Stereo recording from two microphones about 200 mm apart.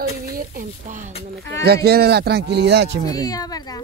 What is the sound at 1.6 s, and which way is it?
Speech, 55° right (ahead or behind).